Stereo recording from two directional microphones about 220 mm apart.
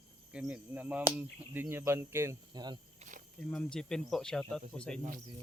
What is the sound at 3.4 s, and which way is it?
Speech, 5° left (ahead or behind).